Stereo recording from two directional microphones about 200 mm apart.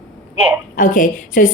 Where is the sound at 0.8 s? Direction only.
40° left (ahead or behind).